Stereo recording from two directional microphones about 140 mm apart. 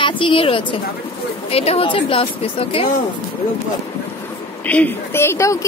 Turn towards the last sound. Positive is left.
turn(degrees=20)  # may be behind; listen again after turning